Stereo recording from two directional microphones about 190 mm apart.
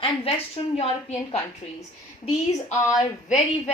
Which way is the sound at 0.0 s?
30° left (ahead or behind).